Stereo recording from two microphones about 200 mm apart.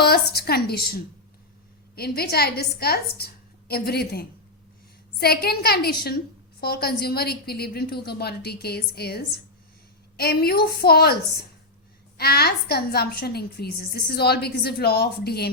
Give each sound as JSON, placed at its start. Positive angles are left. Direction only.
{"t": 0.0, "sound": "a woman's voice", "side_deg": 50}